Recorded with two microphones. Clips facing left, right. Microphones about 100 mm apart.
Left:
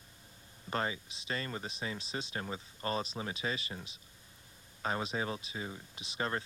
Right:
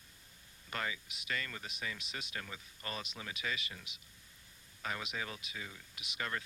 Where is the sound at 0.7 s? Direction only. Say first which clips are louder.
Left 5 dB; 30° left (ahead or behind).